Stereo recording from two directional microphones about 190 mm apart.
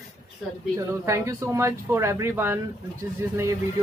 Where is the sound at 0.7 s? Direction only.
15° right (ahead or behind).